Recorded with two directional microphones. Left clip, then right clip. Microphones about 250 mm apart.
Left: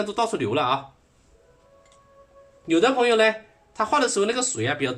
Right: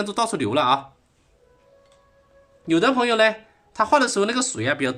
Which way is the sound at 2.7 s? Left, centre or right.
Right.